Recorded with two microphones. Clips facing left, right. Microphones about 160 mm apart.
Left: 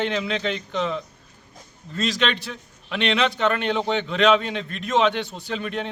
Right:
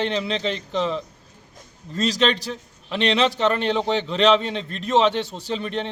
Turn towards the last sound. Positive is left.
turn(degrees=-30)  # may be behind; listen again after turning